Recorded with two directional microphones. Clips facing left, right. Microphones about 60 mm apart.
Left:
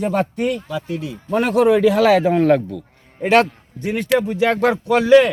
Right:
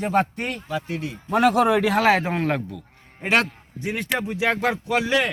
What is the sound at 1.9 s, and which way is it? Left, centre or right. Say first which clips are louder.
Speech: left 5 dB; right.